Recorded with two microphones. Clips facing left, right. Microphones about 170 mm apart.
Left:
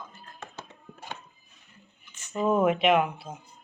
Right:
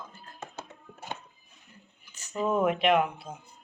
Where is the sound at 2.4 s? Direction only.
5° left (ahead or behind).